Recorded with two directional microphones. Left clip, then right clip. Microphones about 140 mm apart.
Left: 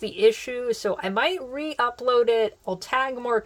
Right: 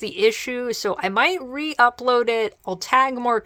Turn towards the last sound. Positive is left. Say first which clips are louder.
# right 5 dB
turn(degrees=-45)  # may be behind; listen again after turning